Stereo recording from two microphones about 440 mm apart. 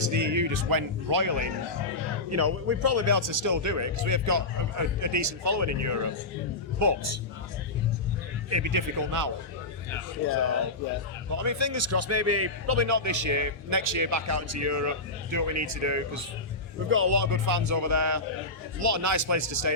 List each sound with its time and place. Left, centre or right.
0.0 s speech: right
2.3 s a man's voice: right
8.4 s speech: right
11.3 s a man's voice: right